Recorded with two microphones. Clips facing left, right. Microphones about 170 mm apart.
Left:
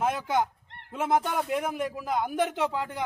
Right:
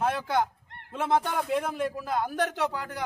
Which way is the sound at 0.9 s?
10° left (ahead or behind).